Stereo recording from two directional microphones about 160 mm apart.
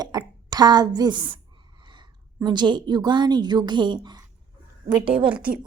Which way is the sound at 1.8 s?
30° right (ahead or behind).